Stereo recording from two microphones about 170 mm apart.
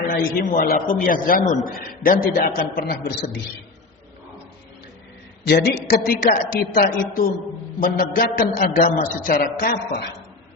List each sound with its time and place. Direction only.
0.3 s a man's voice: 55° left (ahead or behind)
5.5 s a man's voice: 75° left (ahead or behind)